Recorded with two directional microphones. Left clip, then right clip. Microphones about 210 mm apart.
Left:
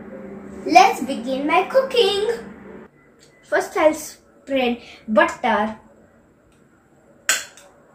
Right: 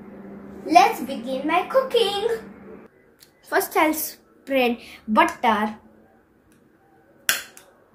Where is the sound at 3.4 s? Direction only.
50° right (ahead or behind).